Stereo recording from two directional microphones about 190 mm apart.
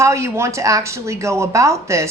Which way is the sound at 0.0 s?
15° right (ahead or behind).